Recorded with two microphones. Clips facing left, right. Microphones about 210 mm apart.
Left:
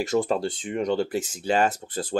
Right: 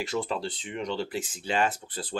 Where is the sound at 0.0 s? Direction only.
45° left (ahead or behind).